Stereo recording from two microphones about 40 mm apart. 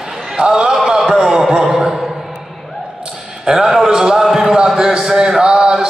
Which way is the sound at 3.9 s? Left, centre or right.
Centre.